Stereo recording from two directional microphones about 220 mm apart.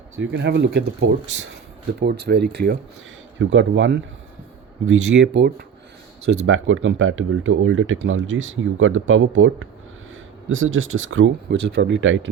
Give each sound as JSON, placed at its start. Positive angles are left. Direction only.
{"t": 0.2, "sound": "speech", "side_deg": -55}
{"t": 3.3, "sound": "speech", "side_deg": -60}
{"t": 6.4, "sound": "speech", "side_deg": -60}